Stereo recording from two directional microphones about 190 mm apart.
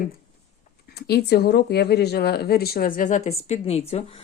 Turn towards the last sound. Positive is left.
turn(degrees=30)  # may be behind; listen again after turning